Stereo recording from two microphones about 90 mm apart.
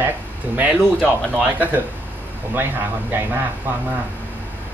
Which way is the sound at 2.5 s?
20° right (ahead or behind).